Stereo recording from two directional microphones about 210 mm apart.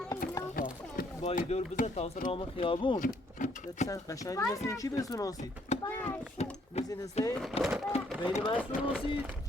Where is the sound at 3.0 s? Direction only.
35° left (ahead or behind).